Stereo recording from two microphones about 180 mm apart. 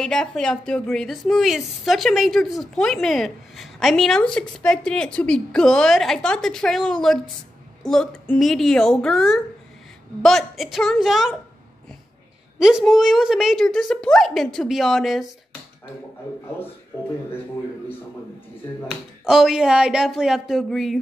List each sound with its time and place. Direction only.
0.0 s a woman's voice: 5° left (ahead or behind)
12.5 s a woman's voice: 5° right (ahead or behind)
18.9 s a woman's voice: centre (ahead or behind)